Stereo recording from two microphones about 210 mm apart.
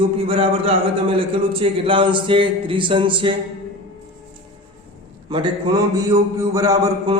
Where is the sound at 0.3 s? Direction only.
25° right (ahead or behind).